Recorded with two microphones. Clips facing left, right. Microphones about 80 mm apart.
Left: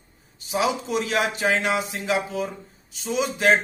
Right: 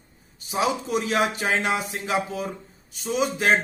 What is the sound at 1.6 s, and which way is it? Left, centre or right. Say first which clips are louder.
Speech: left 1 dB; right.